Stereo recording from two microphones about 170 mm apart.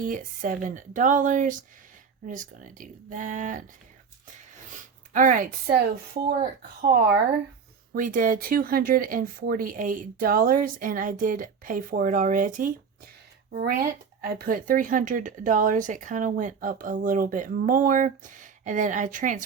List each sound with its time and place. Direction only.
0.0 s speech: 50° right (ahead or behind)
4.7 s a sound: 50° right (ahead or behind)
6.2 s speech: 60° right (ahead or behind)
13.5 s speech: 65° right (ahead or behind); by 19.5 s 50° right (ahead or behind)